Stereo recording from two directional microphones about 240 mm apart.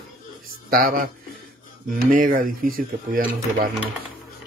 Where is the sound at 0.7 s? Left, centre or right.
Right.